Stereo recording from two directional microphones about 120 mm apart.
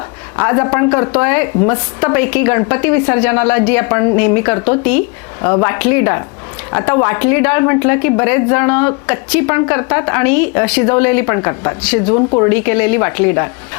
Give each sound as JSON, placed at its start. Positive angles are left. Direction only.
{"t": 0.3, "sound": "a woman's voice", "side_deg": 25}